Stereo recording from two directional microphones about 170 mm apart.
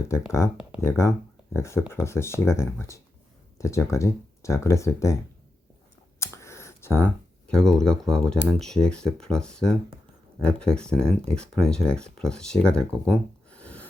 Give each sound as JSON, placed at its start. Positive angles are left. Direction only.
{"t": 0.3, "sound": "speech", "side_deg": 15}
{"t": 6.1, "sound": "speech", "side_deg": 15}